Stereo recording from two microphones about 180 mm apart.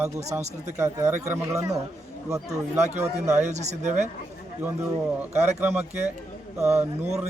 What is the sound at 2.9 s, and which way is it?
A man's voice, 40° right (ahead or behind).